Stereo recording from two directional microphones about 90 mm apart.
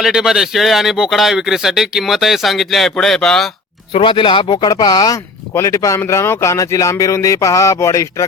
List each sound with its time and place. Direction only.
0.0 s speech: 5° right (ahead or behind)
4.0 s speech: 70° left (ahead or behind); by 8.0 s 35° left (ahead or behind)